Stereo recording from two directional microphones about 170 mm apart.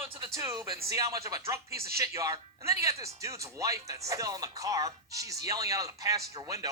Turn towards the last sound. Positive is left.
turn(degrees=-20)  # may be behind; listen again after turning